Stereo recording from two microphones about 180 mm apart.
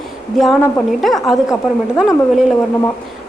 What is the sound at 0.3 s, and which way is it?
Speech, centre (ahead or behind).